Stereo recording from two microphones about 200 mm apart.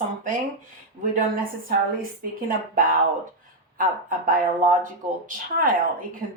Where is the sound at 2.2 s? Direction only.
45° right (ahead or behind).